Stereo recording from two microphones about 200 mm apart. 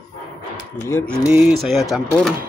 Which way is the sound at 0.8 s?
10° left (ahead or behind).